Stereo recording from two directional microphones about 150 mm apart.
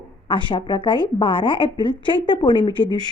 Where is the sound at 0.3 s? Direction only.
35° left (ahead or behind).